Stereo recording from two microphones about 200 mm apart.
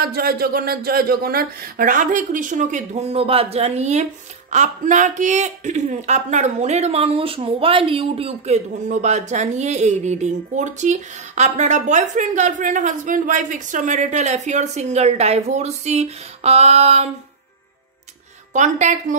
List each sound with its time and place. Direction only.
0.0 s a man's voice: 50° right (ahead or behind); by 17.1 s 30° right (ahead or behind)
18.5 s a man's voice: 35° right (ahead or behind)